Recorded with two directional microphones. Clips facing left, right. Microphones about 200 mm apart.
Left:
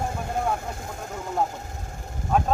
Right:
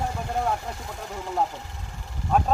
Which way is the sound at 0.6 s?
45° left (ahead or behind).